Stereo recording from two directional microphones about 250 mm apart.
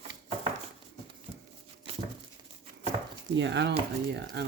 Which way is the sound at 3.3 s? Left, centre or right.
Right.